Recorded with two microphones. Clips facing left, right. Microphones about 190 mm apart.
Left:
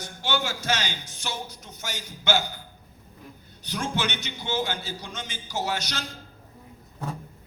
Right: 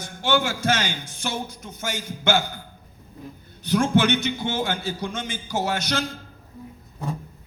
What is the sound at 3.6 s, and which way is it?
A man's voice, 50° right (ahead or behind).